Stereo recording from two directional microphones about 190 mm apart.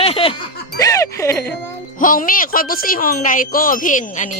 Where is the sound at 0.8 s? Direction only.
15° left (ahead or behind).